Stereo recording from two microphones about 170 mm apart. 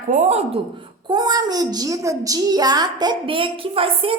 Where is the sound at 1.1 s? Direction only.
25° right (ahead or behind).